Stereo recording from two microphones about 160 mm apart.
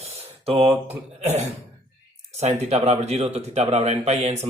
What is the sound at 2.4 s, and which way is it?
A man's voice, 40° right (ahead or behind).